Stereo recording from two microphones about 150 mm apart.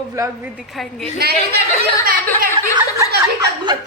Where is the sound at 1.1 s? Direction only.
90° right.